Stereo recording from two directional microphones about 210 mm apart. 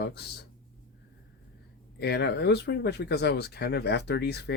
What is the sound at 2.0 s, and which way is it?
Speech, 50° left (ahead or behind).